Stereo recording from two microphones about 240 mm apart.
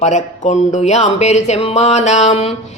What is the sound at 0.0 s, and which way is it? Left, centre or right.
Mantra, left.